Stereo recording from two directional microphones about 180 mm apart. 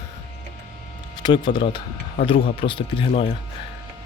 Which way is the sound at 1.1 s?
25° left (ahead or behind).